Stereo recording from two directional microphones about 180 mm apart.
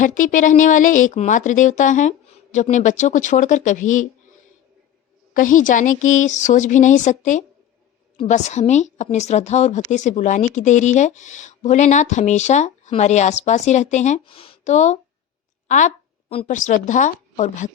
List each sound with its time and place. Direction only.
0.0 s speech: 45° left (ahead or behind)
5.3 s a woman's voice: 45° left (ahead or behind)